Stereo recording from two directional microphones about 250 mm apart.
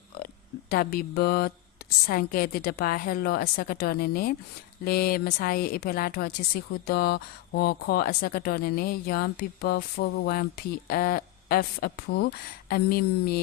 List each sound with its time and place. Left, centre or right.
0.7 s a woman's voice: left